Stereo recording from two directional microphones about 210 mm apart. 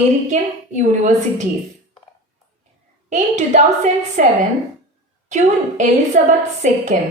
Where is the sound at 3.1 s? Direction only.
35° right (ahead or behind).